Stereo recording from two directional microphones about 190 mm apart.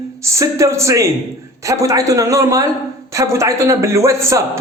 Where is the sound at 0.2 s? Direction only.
15° right (ahead or behind).